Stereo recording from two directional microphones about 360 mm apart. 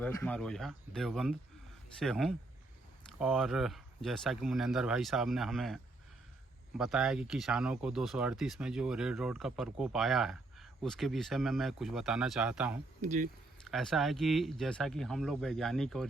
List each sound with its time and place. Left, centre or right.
0.0 s speech: centre
13.0 s speech: right
13.7 s speech: centre